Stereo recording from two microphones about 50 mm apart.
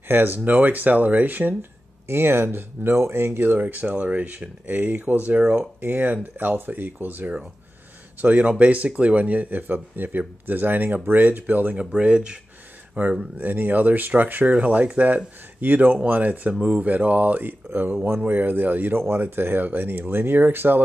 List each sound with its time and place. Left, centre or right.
0.1 s speech: right
1.6 s speech: right
3.6 s speech: right
5.8 s speech: right
11.7 s speech: right
13.0 s speech: right